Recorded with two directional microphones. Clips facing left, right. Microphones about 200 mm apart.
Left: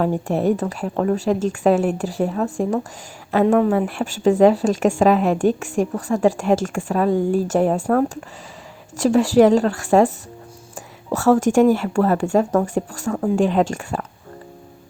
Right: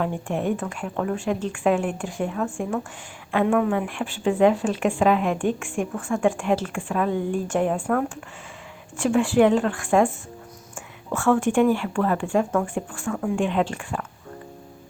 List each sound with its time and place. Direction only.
0.0 s a woman's voice: 35° left (ahead or behind)